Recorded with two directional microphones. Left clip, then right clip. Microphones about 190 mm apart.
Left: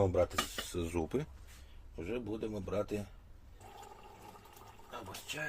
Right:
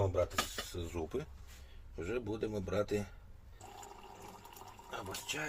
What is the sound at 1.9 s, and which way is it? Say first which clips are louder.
Speech: right 1 dB; 5° left (ahead or behind).